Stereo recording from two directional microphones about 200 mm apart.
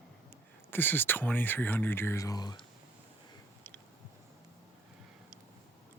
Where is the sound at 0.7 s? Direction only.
10° left (ahead or behind).